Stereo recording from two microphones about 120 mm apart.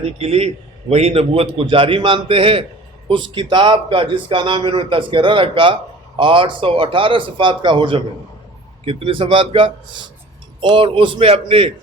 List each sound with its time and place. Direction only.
0.0 s speech: 55° right (ahead or behind)